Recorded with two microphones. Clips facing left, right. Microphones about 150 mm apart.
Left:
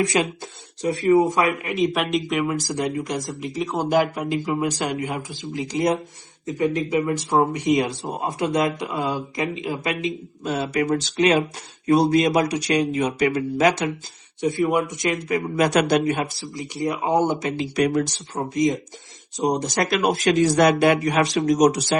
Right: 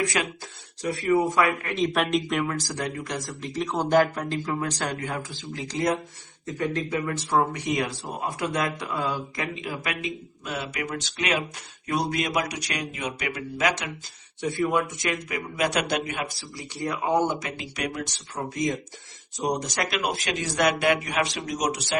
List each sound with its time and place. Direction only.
0.0 s speech: 25° left (ahead or behind)
1.7 s speech: 5° left (ahead or behind)
2.5 s speech: 15° left (ahead or behind)
3.5 s speech: centre (ahead or behind); by 13.9 s 30° left (ahead or behind)
14.4 s speech: 20° left (ahead or behind)
15.3 s speech: 40° left (ahead or behind)
16.6 s speech: 20° left (ahead or behind)
17.7 s speech: 40° left (ahead or behind)
18.4 s speech: 20° left (ahead or behind); by 21.9 s 40° left (ahead or behind)